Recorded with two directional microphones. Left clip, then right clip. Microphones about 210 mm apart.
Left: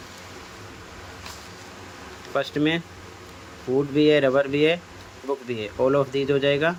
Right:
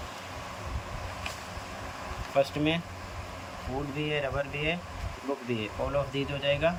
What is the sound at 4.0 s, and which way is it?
Speech, 25° left (ahead or behind).